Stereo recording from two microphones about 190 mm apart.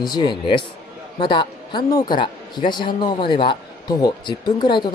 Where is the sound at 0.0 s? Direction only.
20° left (ahead or behind).